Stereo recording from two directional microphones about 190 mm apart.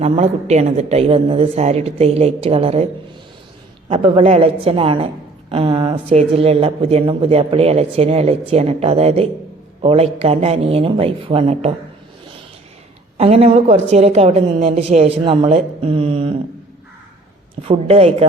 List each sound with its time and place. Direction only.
0.0 s speech: 35° right (ahead or behind)
13.1 s speech: 30° right (ahead or behind)
17.6 s speech: 30° right (ahead or behind)